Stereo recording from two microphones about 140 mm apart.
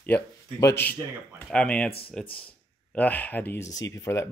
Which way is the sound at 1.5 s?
5° left (ahead or behind).